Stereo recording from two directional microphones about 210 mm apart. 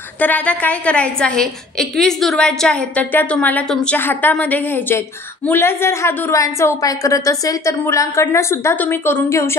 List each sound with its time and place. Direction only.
0.2 s a woman's voice: 5° left (ahead or behind)